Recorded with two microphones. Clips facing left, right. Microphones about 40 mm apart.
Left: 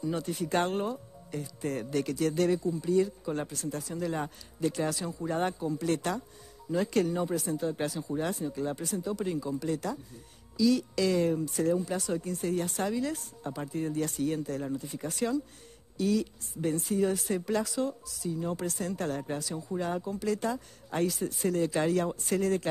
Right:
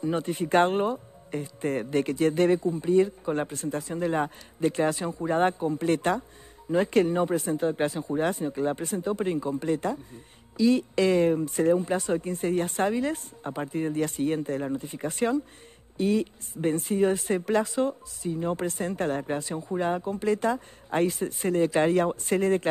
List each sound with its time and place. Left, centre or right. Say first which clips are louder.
0.0 s speech: right 5 dB; right